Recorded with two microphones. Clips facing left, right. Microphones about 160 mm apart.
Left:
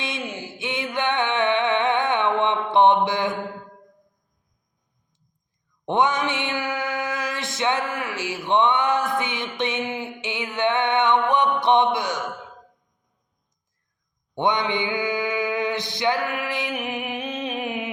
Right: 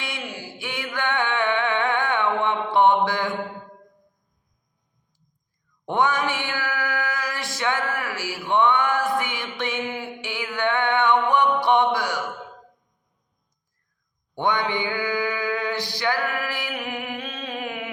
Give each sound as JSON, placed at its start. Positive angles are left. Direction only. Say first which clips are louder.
{"t": 0.0, "sound": "music", "louder": "left 3 dB", "side_deg": 20}
{"t": 5.8, "sound": "mantra", "louder": "left 1 dB", "side_deg": 20}
{"t": 14.3, "sound": "mantra", "louder": "left 1 dB", "side_deg": 20}